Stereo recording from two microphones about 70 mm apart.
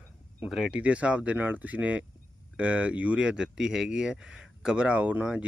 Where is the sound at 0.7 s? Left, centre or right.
Centre.